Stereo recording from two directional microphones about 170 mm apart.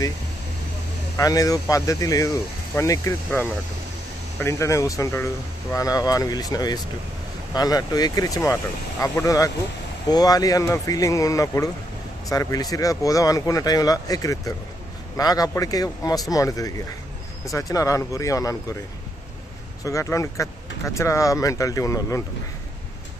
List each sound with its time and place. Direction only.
1.1 s speech: 20° left (ahead or behind)
19.8 s speech: 20° left (ahead or behind)